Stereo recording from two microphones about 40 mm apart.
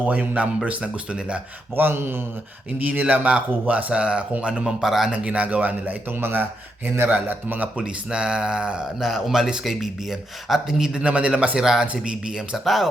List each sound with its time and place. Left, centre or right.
0.0 s speech: right
1.7 s speech: right
2.7 s speech: right
3.1 s a man's voice: right
4.8 s speech: centre
5.1 s speech: right
7.8 s speech: right
9.0 s a man's voice: centre
9.3 s speech: centre
11.5 s speech: centre
12.6 s a man's voice: centre